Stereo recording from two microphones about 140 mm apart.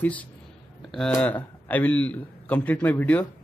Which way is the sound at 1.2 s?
10° left (ahead or behind).